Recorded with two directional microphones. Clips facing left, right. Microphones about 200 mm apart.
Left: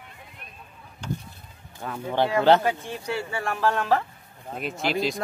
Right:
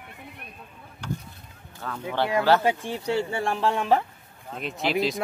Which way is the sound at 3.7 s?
20° right (ahead or behind).